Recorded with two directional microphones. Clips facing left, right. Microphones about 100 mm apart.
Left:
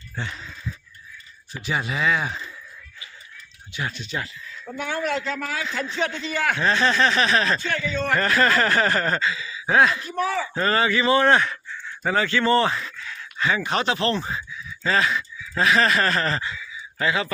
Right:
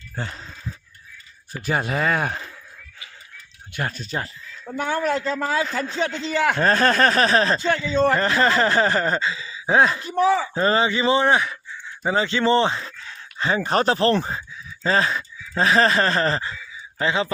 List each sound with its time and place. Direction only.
0.2 s speech: 40° right (ahead or behind)
1.6 s speech: 45° right (ahead or behind)
3.7 s a man's voice: 50° right (ahead or behind); by 5.6 s 30° right (ahead or behind)
5.6 s a man's voice: 45° right (ahead or behind); by 17.2 s 25° right (ahead or behind)